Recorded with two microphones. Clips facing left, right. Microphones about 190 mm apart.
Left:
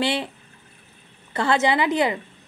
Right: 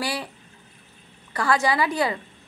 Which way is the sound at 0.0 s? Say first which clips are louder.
Left 5 dB; 25° left (ahead or behind).